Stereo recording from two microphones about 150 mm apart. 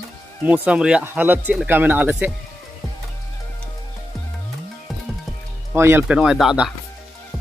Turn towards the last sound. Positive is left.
turn(degrees=-5)  # may be behind; listen again after turning